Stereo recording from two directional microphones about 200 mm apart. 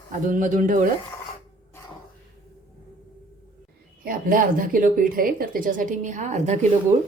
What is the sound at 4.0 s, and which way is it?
Speech, 45° right (ahead or behind).